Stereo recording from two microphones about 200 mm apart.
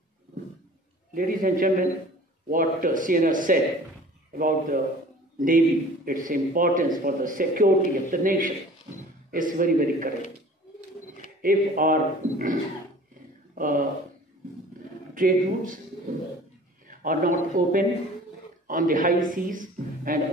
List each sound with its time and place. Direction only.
1.1 s speech: 45° right (ahead or behind)
6.0 s speech: 45° right (ahead or behind)
11.4 s speech: 45° right (ahead or behind)
13.6 s speech: 45° right (ahead or behind)
15.1 s speech: 45° right (ahead or behind)
16.8 s a man's voice: 45° right (ahead or behind)